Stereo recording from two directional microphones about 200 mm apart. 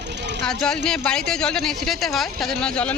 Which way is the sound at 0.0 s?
60° right (ahead or behind).